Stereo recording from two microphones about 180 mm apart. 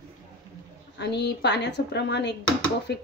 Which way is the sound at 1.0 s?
70° left (ahead or behind).